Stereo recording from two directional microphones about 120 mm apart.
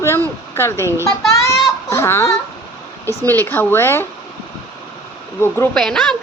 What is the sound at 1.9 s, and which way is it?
A woman's voice, 25° left (ahead or behind).